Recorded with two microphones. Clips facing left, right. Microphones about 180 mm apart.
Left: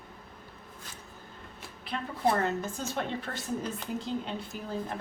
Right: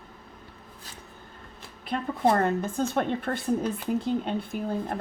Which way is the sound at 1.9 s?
50° right (ahead or behind).